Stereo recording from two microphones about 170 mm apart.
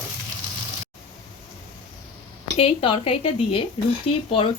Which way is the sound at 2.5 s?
35° left (ahead or behind).